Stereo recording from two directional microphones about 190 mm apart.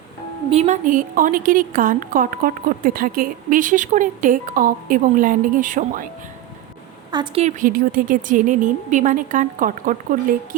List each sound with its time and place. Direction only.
0.5 s a woman's voice: 35° right (ahead or behind)
7.1 s a woman's voice: 20° right (ahead or behind)
7.4 s a woman's voice: 45° right (ahead or behind)